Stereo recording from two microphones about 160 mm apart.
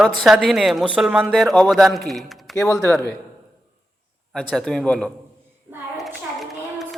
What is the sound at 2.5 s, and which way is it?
Speech, 20° left (ahead or behind).